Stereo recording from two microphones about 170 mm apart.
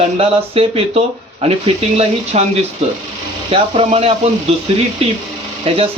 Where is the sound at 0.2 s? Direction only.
35° right (ahead or behind).